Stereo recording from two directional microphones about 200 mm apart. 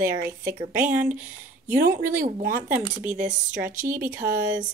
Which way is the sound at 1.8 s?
45° right (ahead or behind).